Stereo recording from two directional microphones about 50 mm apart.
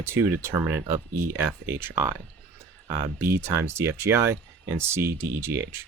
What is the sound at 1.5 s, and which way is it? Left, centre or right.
Speech, right.